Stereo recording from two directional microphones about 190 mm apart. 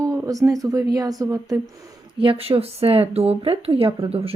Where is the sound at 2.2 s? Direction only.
30° right (ahead or behind).